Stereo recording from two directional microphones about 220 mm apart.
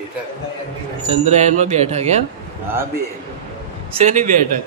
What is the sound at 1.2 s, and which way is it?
Speech, 30° right (ahead or behind).